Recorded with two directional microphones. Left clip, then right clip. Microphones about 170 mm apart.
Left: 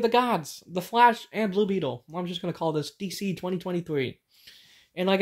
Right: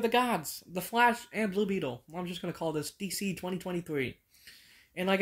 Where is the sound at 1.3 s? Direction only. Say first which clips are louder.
Left 5 dB; 15° right (ahead or behind).